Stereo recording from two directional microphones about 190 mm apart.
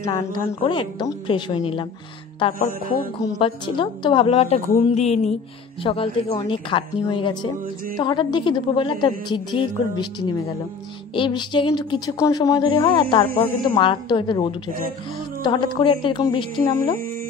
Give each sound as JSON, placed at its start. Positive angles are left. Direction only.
{"t": 0.0, "sound": "a woman's voice", "side_deg": 15}
{"t": 2.6, "sound": "music", "side_deg": 50}
{"t": 3.3, "sound": "a woman's voice", "side_deg": 30}